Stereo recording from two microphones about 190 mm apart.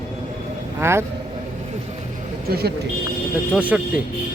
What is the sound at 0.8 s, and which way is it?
Speech, 15° right (ahead or behind).